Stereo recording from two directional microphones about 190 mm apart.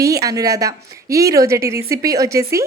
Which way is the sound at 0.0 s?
20° right (ahead or behind).